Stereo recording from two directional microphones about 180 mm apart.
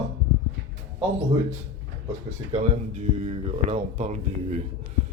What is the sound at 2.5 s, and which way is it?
Speech, 40° right (ahead or behind).